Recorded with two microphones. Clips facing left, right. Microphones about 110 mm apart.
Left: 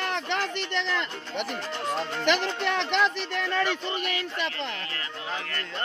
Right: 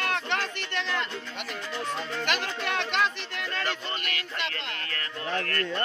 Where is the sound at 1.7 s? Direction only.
30° left (ahead or behind).